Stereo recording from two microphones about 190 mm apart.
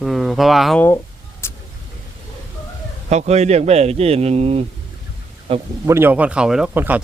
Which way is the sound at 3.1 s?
35° right (ahead or behind).